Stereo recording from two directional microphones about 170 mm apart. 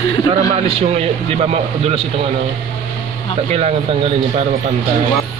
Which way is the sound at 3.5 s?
40° right (ahead or behind).